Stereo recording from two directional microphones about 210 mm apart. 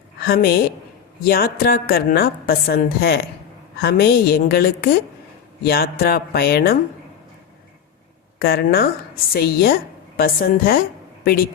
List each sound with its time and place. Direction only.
0.2 s a woman's voice: 45° left (ahead or behind)
8.4 s a woman's voice: 50° left (ahead or behind)